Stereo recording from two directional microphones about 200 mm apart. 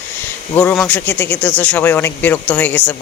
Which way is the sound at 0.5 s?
5° left (ahead or behind).